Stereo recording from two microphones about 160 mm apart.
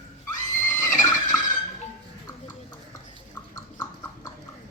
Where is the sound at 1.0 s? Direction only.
25° left (ahead or behind).